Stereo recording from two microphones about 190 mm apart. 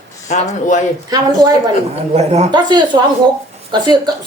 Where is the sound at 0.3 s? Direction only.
35° left (ahead or behind).